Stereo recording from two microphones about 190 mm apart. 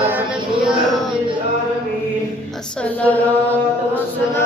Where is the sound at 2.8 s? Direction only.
10° left (ahead or behind).